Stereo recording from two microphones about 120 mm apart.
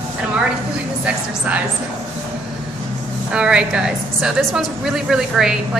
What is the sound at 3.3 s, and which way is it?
A woman's voice, 10° right (ahead or behind).